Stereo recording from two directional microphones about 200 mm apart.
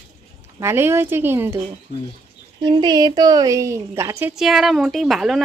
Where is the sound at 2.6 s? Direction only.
20° right (ahead or behind).